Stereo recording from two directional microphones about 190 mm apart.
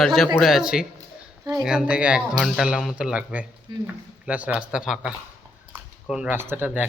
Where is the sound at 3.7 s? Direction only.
25° right (ahead or behind).